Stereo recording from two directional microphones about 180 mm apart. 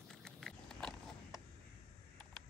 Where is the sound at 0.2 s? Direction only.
5° left (ahead or behind).